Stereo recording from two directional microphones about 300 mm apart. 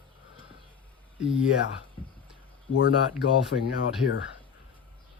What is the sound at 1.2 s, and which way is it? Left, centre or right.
Speech, centre.